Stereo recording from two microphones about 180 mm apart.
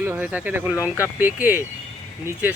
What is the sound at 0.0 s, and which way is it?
Speech, 10° right (ahead or behind).